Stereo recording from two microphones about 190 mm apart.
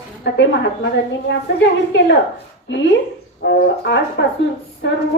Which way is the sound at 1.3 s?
65° left (ahead or behind).